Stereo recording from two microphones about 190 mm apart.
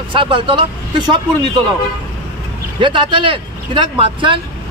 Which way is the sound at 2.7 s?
25° right (ahead or behind).